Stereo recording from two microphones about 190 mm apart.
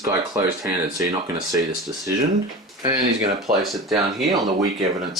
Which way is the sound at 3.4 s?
Centre (ahead or behind).